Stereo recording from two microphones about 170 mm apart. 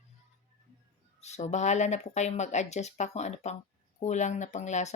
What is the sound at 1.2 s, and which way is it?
Speech, 40° left (ahead or behind).